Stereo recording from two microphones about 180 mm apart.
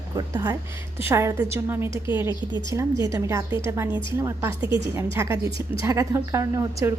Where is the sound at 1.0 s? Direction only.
15° right (ahead or behind).